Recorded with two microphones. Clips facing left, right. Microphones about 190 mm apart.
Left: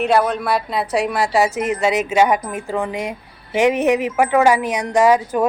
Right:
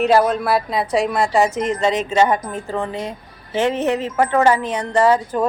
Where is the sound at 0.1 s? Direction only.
Centre (ahead or behind).